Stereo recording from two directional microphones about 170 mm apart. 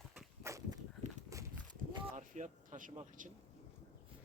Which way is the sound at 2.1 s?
45° right (ahead or behind).